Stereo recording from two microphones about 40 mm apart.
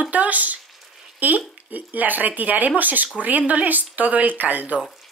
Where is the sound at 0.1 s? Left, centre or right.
Right.